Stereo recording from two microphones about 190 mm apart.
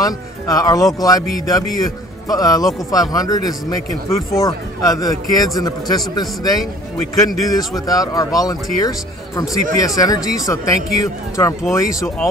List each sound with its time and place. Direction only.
0.0 s speech: 20° left (ahead or behind)